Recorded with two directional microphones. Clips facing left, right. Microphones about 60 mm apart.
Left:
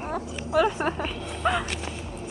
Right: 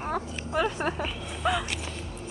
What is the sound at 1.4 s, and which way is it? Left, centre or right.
Speech, left.